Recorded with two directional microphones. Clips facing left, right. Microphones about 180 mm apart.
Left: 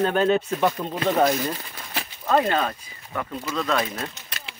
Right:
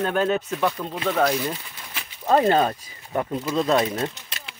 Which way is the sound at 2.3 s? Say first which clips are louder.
Right 3 dB; 30° right (ahead or behind).